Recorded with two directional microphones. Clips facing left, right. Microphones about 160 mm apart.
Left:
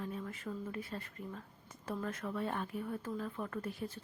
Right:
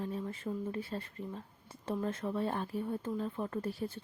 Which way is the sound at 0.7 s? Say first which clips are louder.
Right 4 dB; 30° right (ahead or behind).